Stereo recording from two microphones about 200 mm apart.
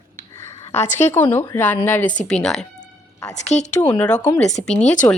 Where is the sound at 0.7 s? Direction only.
35° left (ahead or behind).